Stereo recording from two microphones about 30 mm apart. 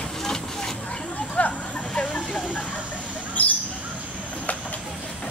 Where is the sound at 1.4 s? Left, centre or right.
Left.